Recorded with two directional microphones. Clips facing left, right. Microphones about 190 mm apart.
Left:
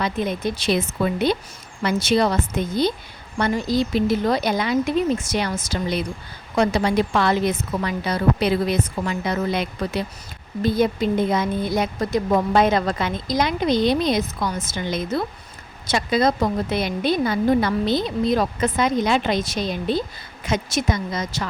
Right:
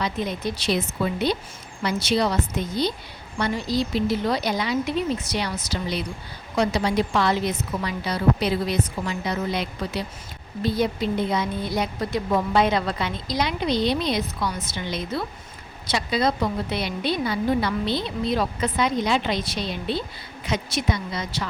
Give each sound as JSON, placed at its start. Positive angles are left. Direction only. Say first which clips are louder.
{"t": 0.0, "sound": "speech", "louder": "left 3 dB", "side_deg": 50}